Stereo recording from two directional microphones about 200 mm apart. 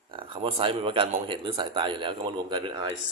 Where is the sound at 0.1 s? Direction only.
25° right (ahead or behind).